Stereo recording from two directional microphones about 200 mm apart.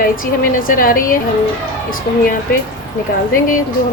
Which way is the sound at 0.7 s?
45° left (ahead or behind).